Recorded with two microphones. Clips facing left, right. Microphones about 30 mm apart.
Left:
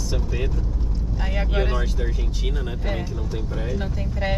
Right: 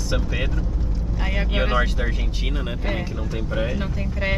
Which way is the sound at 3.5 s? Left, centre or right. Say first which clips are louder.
Right 5 dB; right.